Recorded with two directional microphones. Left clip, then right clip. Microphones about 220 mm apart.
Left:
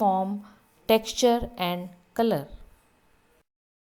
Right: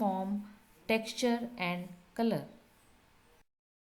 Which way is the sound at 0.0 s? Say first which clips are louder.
Left 10 dB; 25° left (ahead or behind).